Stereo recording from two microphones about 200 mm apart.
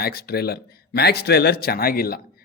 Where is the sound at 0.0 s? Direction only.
50° left (ahead or behind).